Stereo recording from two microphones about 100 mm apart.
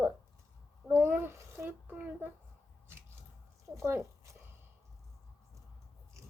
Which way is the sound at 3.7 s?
30° right (ahead or behind).